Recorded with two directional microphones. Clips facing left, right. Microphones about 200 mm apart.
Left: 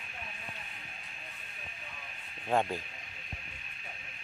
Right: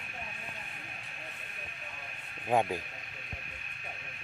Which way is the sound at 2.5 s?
15° right (ahead or behind).